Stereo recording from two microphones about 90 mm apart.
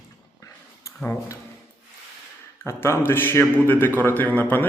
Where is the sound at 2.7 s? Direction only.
30° left (ahead or behind).